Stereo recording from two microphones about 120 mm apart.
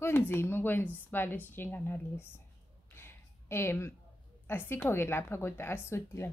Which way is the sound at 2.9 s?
20° left (ahead or behind).